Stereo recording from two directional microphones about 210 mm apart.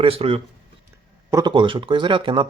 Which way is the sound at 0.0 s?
25° right (ahead or behind).